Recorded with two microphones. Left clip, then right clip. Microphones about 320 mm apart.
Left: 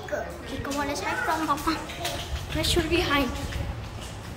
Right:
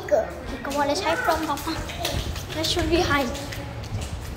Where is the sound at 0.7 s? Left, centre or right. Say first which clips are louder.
Right 7 dB; centre.